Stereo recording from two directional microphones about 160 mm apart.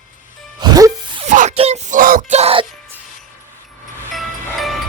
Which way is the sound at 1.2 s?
50° right (ahead or behind).